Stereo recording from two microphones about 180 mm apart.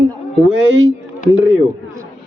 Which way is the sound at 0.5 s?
90° right.